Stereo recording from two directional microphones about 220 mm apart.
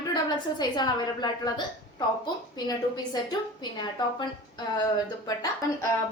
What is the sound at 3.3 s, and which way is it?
Speech, 20° left (ahead or behind).